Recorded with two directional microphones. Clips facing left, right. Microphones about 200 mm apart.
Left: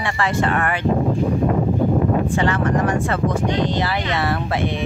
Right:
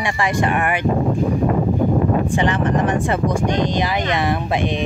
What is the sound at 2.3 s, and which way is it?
Speech, 20° right (ahead or behind).